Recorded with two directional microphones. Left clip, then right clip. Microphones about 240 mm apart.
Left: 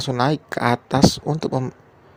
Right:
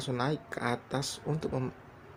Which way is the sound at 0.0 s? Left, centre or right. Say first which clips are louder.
Left 12 dB; left.